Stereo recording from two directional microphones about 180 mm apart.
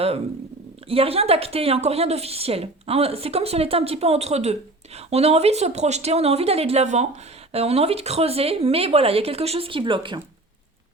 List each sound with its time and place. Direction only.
0.9 s a woman's voice: 35° right (ahead or behind)